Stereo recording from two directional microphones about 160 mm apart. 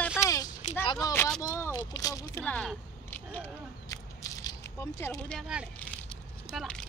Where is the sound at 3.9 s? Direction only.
20° left (ahead or behind).